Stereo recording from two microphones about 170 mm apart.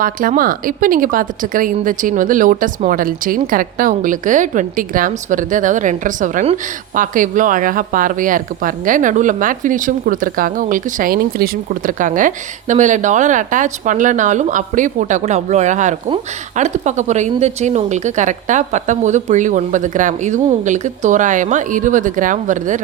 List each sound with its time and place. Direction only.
0.0 s speech: 55° right (ahead or behind)